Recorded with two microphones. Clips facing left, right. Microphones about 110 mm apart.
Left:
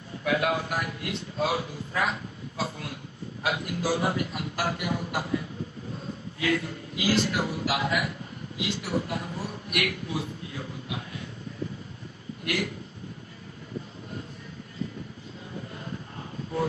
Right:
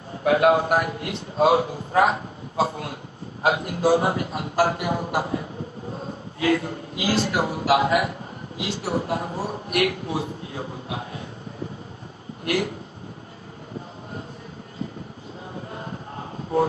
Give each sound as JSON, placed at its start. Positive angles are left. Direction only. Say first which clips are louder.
{"t": 0.3, "sound": "a man's voice", "louder": "right 9 dB", "side_deg": -50}
{"t": 4.7, "sound": "a man's voice", "louder": "right 5 dB", "side_deg": -50}
{"t": 7.3, "sound": "a man's voice", "louder": "right 7 dB", "side_deg": -50}
{"t": 12.5, "sound": "a man's voice", "louder": "right 6 dB", "side_deg": -40}